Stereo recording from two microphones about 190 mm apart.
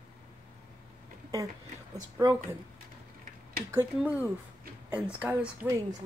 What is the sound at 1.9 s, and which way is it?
Speech, 20° right (ahead or behind).